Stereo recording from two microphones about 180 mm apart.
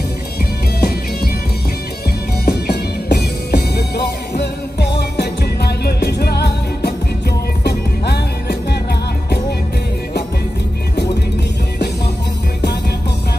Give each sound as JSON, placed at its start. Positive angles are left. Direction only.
{"t": 0.7, "sound": "music", "side_deg": 65}
{"t": 2.4, "sound": "music", "side_deg": 60}